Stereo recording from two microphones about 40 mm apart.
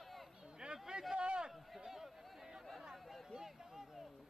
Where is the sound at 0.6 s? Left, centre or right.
Right.